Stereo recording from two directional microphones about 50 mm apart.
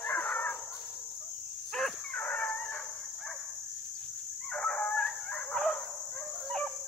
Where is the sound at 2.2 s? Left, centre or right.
Centre.